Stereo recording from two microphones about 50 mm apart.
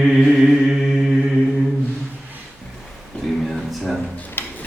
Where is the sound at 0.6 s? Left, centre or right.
Centre.